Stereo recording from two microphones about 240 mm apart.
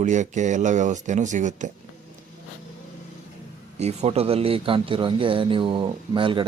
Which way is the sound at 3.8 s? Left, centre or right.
Right.